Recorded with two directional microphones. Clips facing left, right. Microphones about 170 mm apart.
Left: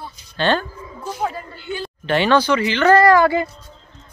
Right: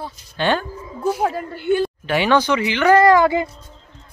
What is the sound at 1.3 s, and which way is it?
Speech, 55° right (ahead or behind).